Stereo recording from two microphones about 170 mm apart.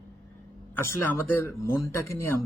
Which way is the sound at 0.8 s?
15° left (ahead or behind).